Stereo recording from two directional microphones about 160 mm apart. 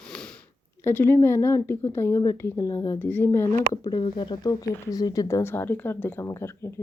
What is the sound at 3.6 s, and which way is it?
A woman's voice, 25° left (ahead or behind).